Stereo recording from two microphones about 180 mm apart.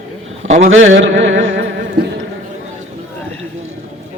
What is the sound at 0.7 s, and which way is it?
Carnatic music, 90° right.